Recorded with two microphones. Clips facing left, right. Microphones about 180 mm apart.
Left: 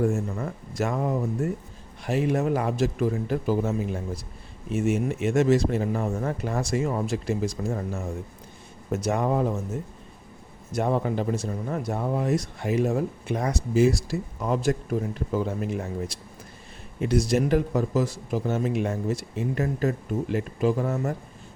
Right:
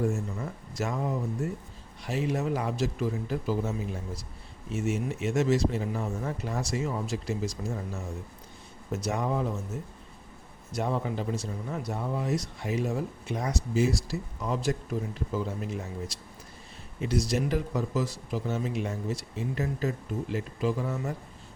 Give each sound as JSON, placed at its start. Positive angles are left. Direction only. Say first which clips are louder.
{"t": 0.3, "sound": "speech", "louder": "left 5 dB", "side_deg": 60}
{"t": 10.7, "sound": "speech", "louder": "left 5 dB", "side_deg": 55}